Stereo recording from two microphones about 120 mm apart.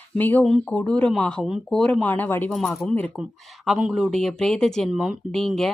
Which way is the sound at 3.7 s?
5° right (ahead or behind).